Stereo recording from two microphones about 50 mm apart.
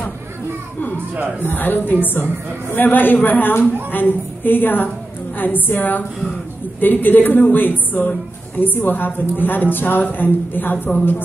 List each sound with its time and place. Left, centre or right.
1.4 s a woman's voice: left